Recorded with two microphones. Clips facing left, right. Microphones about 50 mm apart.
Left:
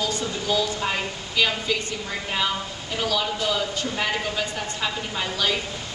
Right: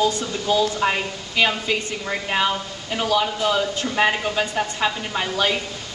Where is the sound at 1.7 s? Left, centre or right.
Right.